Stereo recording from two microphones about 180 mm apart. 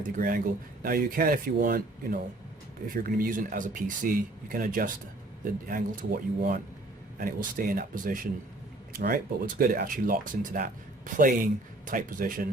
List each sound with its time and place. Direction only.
0.2 s speech: 50° right (ahead or behind)